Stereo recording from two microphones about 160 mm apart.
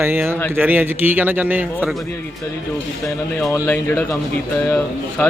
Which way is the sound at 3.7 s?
10° left (ahead or behind).